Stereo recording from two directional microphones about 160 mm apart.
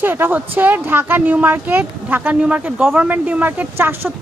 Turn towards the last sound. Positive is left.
turn(degrees=-15)  # may be behind; listen again after turning